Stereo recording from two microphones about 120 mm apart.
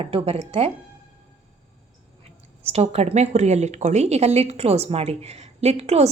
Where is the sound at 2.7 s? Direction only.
60° right (ahead or behind).